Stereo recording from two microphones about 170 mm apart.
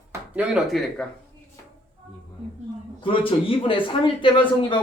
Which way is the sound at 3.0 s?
30° left (ahead or behind).